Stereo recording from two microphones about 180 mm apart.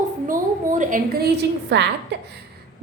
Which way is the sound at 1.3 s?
75° right (ahead or behind).